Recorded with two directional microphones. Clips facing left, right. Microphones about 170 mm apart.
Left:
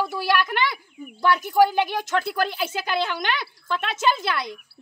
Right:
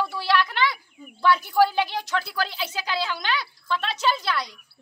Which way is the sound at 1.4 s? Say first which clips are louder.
Left 2 dB; 15° left (ahead or behind).